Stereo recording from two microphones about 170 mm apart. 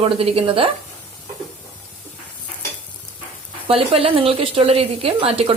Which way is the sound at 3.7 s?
35° right (ahead or behind).